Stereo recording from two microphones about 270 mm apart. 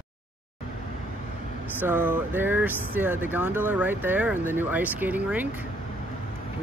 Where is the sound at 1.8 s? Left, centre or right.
Centre.